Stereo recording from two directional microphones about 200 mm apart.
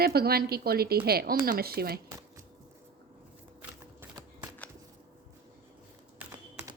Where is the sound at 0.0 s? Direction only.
50° right (ahead or behind).